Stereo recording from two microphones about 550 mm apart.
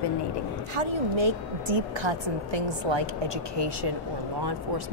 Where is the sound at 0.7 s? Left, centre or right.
Right.